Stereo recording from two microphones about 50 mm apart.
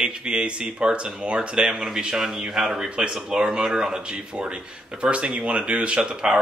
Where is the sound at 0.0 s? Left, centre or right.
Centre.